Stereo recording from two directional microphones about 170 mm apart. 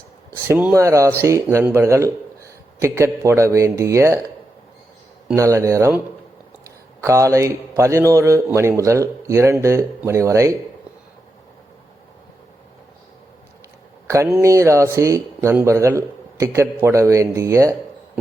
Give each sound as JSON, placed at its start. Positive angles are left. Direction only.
{"t": 0.3, "sound": "speech", "side_deg": -15}
{"t": 5.3, "sound": "speech", "side_deg": -20}
{"t": 7.0, "sound": "speech", "side_deg": -20}
{"t": 14.1, "sound": "speech", "side_deg": -15}